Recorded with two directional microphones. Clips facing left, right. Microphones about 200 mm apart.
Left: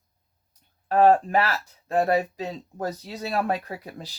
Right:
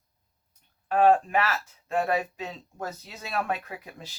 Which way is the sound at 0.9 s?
35° left (ahead or behind).